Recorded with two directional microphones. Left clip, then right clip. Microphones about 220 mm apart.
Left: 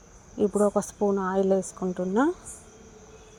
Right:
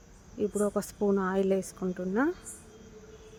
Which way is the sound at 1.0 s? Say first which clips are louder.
Left 1 dB; 10° right (ahead or behind).